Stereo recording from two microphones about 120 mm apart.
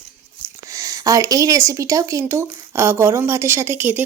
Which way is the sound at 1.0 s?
30° right (ahead or behind).